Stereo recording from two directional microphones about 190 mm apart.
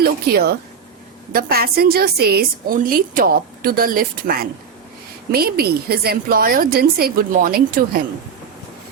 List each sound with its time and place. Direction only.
0.0 s a woman's voice: 55° right (ahead or behind)